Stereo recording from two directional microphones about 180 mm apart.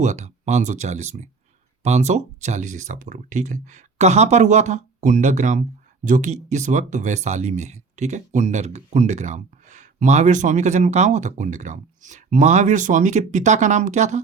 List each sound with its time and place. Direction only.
0.0 s speech: 40° right (ahead or behind)